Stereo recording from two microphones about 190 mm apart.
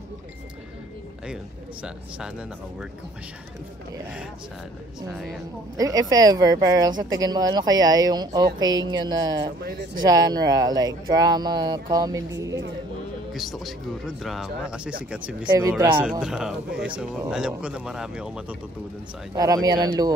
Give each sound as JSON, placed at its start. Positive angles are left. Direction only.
{"t": 1.2, "sound": "speech", "side_deg": -5}
{"t": 5.8, "sound": "speech", "side_deg": -20}
{"t": 9.6, "sound": "speech", "side_deg": -60}
{"t": 10.0, "sound": "speech", "side_deg": -20}
{"t": 13.3, "sound": "speech", "side_deg": 0}
{"t": 15.4, "sound": "speech", "side_deg": -20}
{"t": 16.0, "sound": "speech", "side_deg": -5}
{"t": 19.3, "sound": "speech", "side_deg": -20}